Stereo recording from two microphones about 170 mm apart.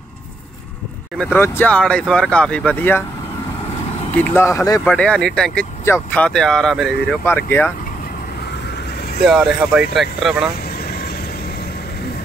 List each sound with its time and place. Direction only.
1.1 s speech: 10° left (ahead or behind)
4.2 s speech: 15° left (ahead or behind)
4.8 s speech: 5° left (ahead or behind)
7.2 s speech: 15° left (ahead or behind)
9.2 s speech: centre (ahead or behind)
10.7 s vehicle: 65° left (ahead or behind)